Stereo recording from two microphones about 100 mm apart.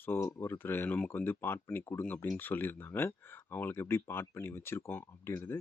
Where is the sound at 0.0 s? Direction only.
25° left (ahead or behind).